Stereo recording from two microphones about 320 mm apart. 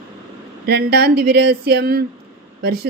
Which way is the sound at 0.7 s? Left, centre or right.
Right.